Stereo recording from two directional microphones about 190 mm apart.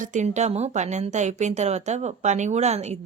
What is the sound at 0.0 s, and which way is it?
A woman's voice, 40° right (ahead or behind).